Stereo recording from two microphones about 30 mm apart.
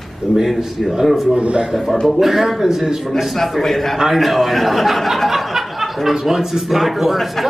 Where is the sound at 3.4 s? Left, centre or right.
Centre.